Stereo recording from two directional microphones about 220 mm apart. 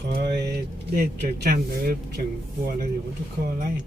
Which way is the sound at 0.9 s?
40° right (ahead or behind).